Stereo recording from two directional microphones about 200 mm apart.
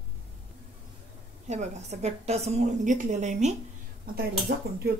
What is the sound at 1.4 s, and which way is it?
A woman's voice, 35° right (ahead or behind).